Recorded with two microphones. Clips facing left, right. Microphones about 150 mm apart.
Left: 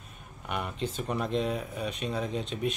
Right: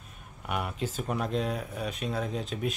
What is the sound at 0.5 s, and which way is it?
Speech, 5° right (ahead or behind).